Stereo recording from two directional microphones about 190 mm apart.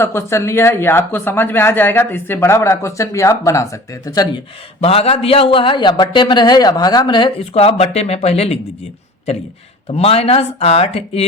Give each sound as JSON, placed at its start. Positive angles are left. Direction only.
{"t": 0.0, "sound": "speech", "side_deg": 15}
{"t": 4.8, "sound": "a man's voice", "side_deg": 30}
{"t": 9.9, "sound": "speech", "side_deg": 30}